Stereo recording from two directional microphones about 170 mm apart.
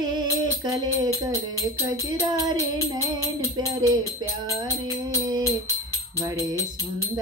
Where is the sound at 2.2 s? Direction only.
20° right (ahead or behind).